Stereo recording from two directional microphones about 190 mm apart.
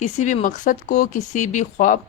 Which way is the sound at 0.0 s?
40° left (ahead or behind).